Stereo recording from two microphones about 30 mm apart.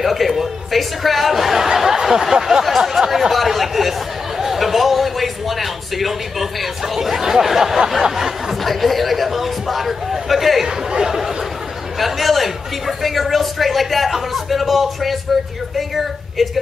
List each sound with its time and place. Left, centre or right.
0.0 s chuckle: centre
2.9 s chatter: centre
4.4 s a sound: centre
8.2 s chatter: centre
10.9 s a sound: centre
12.0 s a man's voice: centre